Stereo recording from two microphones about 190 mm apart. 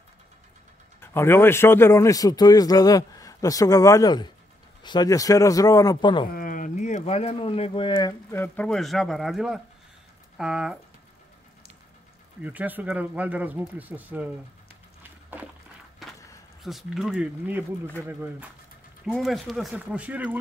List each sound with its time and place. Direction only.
1.0 s a man's voice: 10° left (ahead or behind)
6.3 s speech: 45° left (ahead or behind); by 8.1 s 25° left (ahead or behind)
8.3 s speech: 10° left (ahead or behind)
12.4 s speech: 10° right (ahead or behind)
16.6 s speech: centre (ahead or behind)
19.0 s speech: centre (ahead or behind)